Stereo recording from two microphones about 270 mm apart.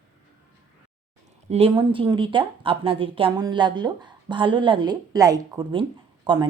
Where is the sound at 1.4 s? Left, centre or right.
Right.